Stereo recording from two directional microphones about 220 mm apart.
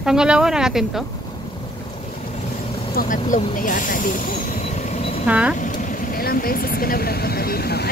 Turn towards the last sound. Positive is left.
turn(degrees=45)  # may be behind; listen again after turning